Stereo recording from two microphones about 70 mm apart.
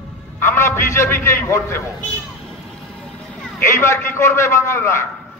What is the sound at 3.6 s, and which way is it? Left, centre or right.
A man's voice, left.